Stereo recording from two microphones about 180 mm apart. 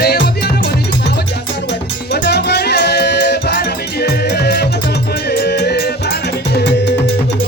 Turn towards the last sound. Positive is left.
turn(degrees=65)  # may be behind; listen again after turning